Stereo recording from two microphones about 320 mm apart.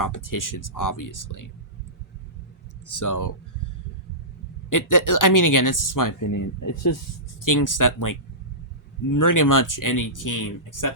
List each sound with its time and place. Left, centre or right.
0.0 s speech: left
2.8 s speech: left
4.7 s speech: left
7.4 s speech: left
9.1 s speech: left